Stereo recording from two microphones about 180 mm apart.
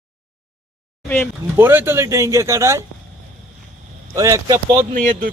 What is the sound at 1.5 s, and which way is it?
Speech, 10° right (ahead or behind).